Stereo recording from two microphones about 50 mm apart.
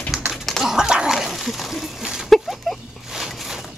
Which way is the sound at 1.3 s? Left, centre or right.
Centre.